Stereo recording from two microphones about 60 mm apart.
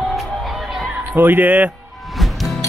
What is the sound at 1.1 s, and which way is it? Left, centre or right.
Speech, right.